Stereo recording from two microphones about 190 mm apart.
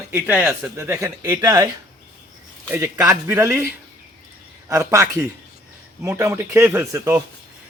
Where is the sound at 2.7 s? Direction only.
15° right (ahead or behind).